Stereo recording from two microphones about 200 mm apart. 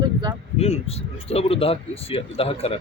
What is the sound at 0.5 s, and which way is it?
Speech, 30° left (ahead or behind).